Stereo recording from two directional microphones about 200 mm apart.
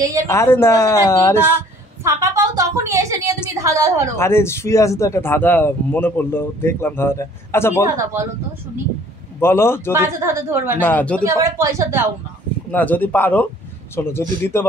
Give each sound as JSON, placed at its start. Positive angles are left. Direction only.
{"t": 0.3, "sound": "speech", "side_deg": 10}
{"t": 2.0, "sound": "a sound", "side_deg": -15}
{"t": 3.5, "sound": "a woman's voice", "side_deg": -15}
{"t": 4.2, "sound": "speech", "side_deg": 15}
{"t": 7.8, "sound": "a woman's voice", "side_deg": -15}
{"t": 9.4, "sound": "speech", "side_deg": 10}
{"t": 9.9, "sound": "a woman's voice", "side_deg": -10}
{"t": 10.8, "sound": "speech", "side_deg": 10}
{"t": 11.2, "sound": "a woman's voice", "side_deg": -15}
{"t": 12.7, "sound": "speech", "side_deg": 10}